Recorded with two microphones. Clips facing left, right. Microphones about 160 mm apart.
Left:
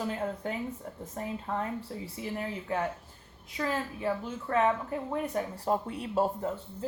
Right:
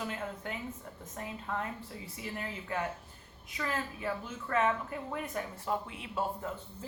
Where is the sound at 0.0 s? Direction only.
35° left (ahead or behind).